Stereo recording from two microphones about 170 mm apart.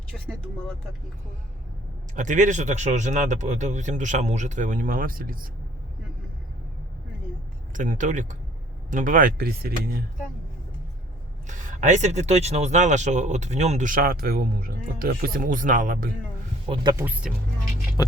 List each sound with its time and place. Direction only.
0.3 s speech: 5° left (ahead or behind)
2.1 s speech: 45° right (ahead or behind)
7.7 s speech: 50° right (ahead or behind)
11.4 s speech: 45° right (ahead or behind)
17.0 s speech: 10° right (ahead or behind)